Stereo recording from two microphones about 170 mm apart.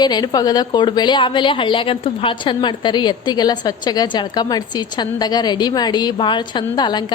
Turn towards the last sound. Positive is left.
turn(degrees=25)  # may be behind; listen again after turning